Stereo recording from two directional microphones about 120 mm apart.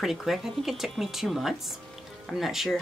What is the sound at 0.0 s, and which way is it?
Speech, centre (ahead or behind).